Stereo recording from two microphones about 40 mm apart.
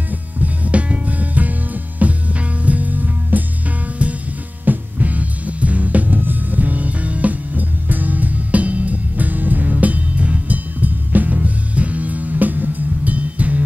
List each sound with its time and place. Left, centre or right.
0.4 s music: right
4.0 s heart sounds: right
4.6 s music: right